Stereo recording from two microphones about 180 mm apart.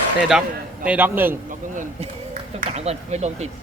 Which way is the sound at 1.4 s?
45° right (ahead or behind).